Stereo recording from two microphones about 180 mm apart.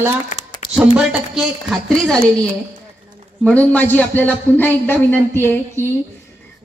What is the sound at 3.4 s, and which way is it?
A man's voice, 10° left (ahead or behind).